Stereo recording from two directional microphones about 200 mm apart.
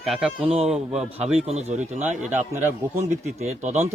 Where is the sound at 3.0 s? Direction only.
35° right (ahead or behind).